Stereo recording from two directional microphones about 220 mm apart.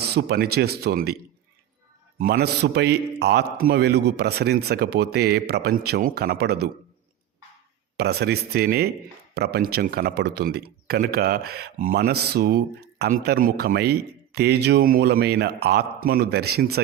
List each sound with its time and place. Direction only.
0.0 s a man's voice: 45° right (ahead or behind)
2.1 s a man's voice: 40° right (ahead or behind)
7.9 s a man's voice: 45° right (ahead or behind)